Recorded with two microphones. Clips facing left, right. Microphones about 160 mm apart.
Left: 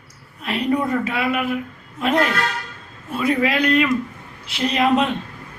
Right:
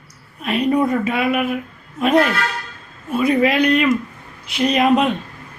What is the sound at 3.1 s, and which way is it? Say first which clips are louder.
A man's voice: right 4 dB; 15° right (ahead or behind).